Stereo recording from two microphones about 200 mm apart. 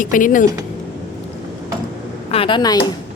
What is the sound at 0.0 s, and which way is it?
Speech, 40° left (ahead or behind).